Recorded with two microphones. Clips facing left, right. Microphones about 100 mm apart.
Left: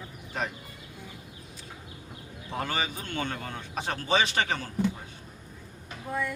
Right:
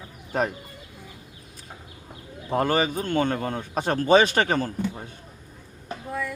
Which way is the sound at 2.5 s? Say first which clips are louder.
Right 9 dB; 45° right (ahead or behind).